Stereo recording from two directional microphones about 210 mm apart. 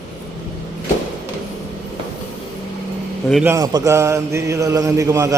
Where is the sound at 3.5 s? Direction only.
15° right (ahead or behind).